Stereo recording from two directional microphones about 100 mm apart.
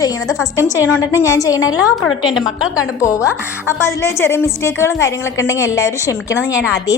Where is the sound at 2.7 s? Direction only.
30° left (ahead or behind).